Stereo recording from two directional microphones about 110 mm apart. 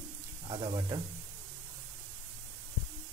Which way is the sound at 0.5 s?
40° right (ahead or behind).